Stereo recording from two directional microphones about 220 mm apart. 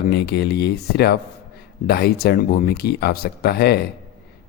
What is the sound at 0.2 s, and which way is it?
A man's voice, 45° left (ahead or behind).